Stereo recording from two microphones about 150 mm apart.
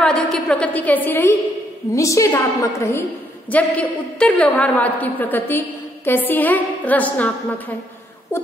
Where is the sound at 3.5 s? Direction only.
10° left (ahead or behind).